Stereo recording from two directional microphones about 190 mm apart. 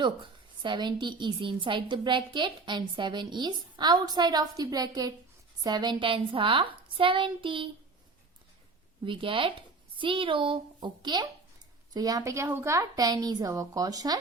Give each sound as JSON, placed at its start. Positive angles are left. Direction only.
{"t": 0.0, "sound": "a woman's voice", "side_deg": -25}
{"t": 9.0, "sound": "a woman's voice", "side_deg": -25}